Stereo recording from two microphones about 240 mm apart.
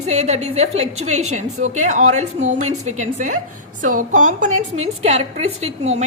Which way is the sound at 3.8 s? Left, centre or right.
Right.